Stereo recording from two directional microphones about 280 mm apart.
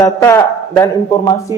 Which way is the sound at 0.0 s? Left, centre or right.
Centre.